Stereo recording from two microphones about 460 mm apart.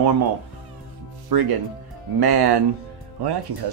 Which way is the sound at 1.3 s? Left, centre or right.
Right.